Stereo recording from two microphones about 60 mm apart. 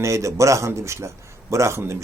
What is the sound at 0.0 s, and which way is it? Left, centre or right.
A man's voice, right.